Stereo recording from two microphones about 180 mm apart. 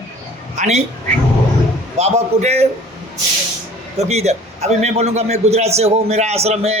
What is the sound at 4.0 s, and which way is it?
A man's voice, 35° right (ahead or behind).